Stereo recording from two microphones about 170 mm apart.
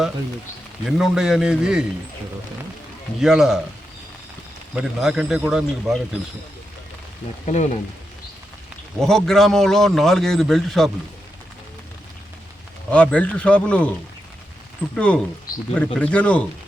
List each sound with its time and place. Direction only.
0.9 s a man's voice: centre (ahead or behind)
3.2 s a man's voice: centre (ahead or behind)
4.7 s a man's voice: centre (ahead or behind)
7.4 s speech: 40° left (ahead or behind)
9.0 s a man's voice: centre (ahead or behind)
12.9 s speech: 10° left (ahead or behind)
14.9 s speech: 5° left (ahead or behind)